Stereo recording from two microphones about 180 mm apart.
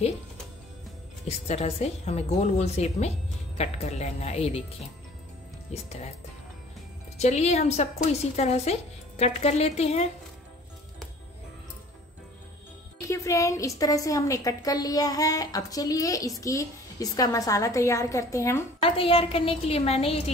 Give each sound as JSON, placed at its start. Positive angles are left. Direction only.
{"t": 1.2, "sound": "a woman's voice", "side_deg": 35}
{"t": 5.7, "sound": "a woman's voice", "side_deg": 35}
{"t": 7.2, "sound": "a woman's voice", "side_deg": 35}
{"t": 13.1, "sound": "a woman's voice", "side_deg": 15}
{"t": 18.8, "sound": "a woman's voice", "side_deg": 30}